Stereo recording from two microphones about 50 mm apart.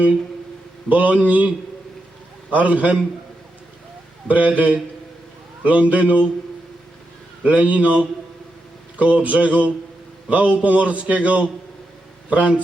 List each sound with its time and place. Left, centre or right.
0.9 s a man's voice: right
4.3 s a man's voice: right
7.4 s a man's voice: right